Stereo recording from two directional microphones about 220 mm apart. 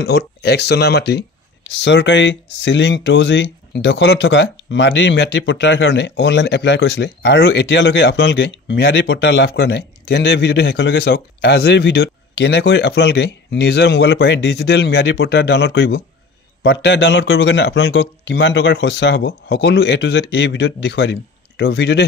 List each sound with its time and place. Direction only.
0.0 s speech: 50° left (ahead or behind)